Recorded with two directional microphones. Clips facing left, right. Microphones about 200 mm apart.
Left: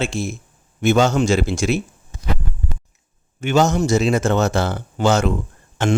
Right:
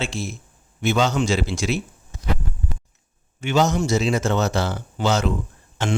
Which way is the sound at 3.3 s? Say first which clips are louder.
Left 3 dB; 45° left (ahead or behind).